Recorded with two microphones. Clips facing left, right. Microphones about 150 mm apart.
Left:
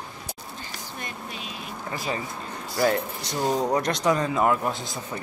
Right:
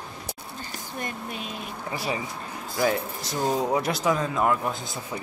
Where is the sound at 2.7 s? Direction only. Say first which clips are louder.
Left 2 dB; centre (ahead or behind).